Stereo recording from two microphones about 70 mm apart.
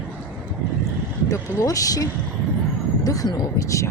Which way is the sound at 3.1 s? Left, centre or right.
Left.